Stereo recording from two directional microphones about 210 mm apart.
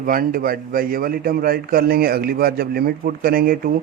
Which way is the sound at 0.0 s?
40° right (ahead or behind).